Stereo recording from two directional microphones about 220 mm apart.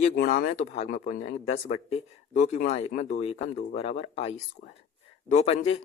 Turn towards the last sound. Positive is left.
turn(degrees=30)  # may be behind; listen again after turning